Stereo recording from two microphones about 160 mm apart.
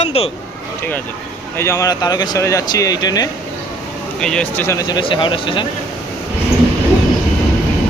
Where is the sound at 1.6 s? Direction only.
20° left (ahead or behind).